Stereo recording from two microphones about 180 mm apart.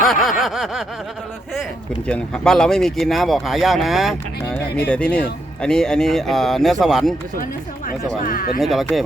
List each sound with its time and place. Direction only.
0.0 s speech: centre (ahead or behind)
2.0 s speech: 5° left (ahead or behind)
5.6 s speech: 5° left (ahead or behind)
8.2 s speech: 50° left (ahead or behind)
8.6 s speech: centre (ahead or behind)